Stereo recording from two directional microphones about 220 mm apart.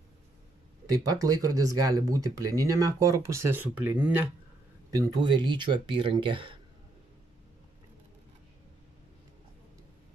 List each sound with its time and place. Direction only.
0.9 s speech: 15° right (ahead or behind)
4.9 s speech: 15° right (ahead or behind)